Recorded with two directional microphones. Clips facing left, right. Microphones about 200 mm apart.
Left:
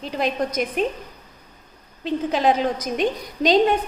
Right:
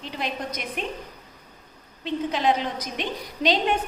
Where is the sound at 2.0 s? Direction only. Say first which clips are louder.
Left 4 dB; 45° left (ahead or behind).